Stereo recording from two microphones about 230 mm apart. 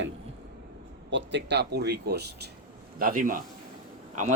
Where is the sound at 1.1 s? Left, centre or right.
Right.